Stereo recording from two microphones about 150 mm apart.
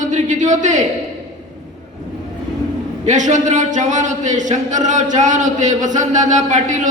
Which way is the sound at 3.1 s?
55° right (ahead or behind).